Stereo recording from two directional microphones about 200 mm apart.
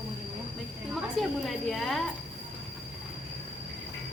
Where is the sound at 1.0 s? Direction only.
Centre (ahead or behind).